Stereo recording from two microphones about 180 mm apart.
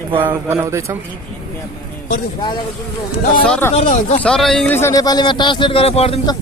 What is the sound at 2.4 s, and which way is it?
Speech, 25° left (ahead or behind).